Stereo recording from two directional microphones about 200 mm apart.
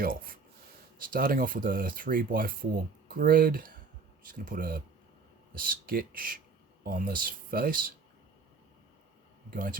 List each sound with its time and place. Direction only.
0.0 s speech: 45° right (ahead or behind)
9.5 s speech: 45° right (ahead or behind)